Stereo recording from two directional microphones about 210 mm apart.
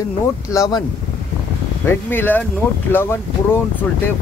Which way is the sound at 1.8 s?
10° left (ahead or behind).